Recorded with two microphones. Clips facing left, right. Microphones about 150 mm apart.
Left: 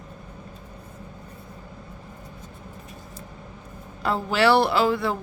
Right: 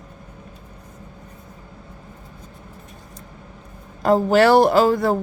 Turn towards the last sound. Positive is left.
turn(degrees=-40)  # may be behind; listen again after turning